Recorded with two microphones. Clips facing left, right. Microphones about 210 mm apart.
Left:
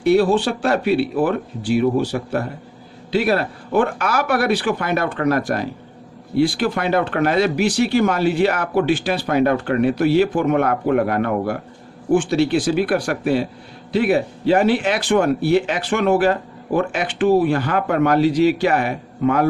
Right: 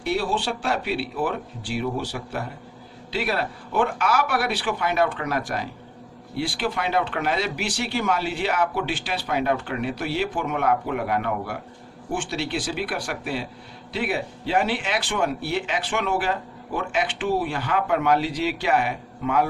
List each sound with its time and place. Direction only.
0.0 s speech: 45° left (ahead or behind)